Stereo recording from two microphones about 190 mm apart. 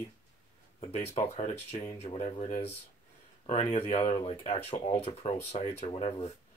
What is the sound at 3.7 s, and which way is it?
Speech, 30° left (ahead or behind).